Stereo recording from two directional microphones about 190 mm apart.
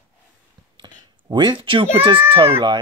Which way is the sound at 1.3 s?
25° right (ahead or behind).